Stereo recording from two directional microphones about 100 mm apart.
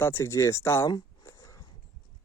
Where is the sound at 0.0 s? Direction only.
25° left (ahead or behind).